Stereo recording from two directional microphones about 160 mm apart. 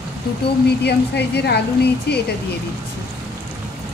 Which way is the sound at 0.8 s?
90° left.